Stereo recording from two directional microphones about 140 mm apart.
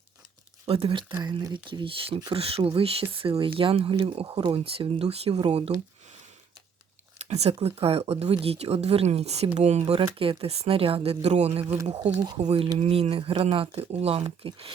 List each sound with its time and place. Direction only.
0.6 s speech: 40° right (ahead or behind)
1.2 s speech: 30° right (ahead or behind); by 5.7 s 45° right (ahead or behind)
7.3 s speech: 50° right (ahead or behind)
11.6 s speech: 15° right (ahead or behind)
12.4 s speech: 45° right (ahead or behind)